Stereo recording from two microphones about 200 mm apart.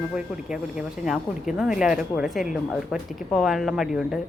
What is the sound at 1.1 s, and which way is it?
Speech, centre (ahead or behind).